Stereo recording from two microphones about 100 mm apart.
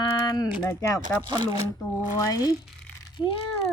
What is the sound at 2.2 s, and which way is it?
Speech, 40° left (ahead or behind).